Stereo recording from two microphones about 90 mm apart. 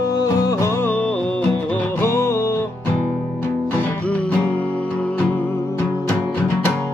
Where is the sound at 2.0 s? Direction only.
30° left (ahead or behind).